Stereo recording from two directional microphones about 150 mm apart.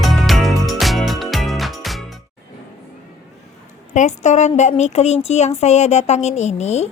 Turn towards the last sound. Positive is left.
turn(degrees=45)  # may be behind; listen again after turning